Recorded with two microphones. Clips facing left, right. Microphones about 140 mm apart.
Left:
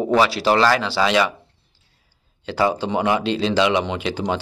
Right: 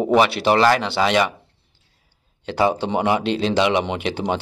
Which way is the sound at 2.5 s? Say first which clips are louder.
Right 1 dB; 20° right (ahead or behind).